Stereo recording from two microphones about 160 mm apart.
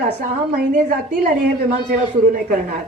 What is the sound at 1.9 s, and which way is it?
Speech, 60° right (ahead or behind).